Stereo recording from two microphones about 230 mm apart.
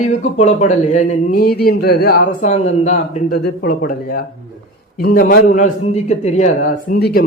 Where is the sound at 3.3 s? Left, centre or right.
Left.